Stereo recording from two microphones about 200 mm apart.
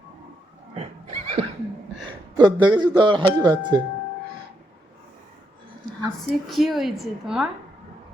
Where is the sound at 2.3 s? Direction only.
20° right (ahead or behind).